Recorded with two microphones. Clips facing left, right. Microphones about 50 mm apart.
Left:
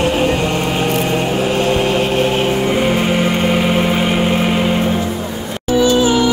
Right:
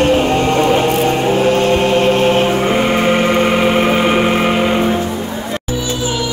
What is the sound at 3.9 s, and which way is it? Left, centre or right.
Vehicle, right.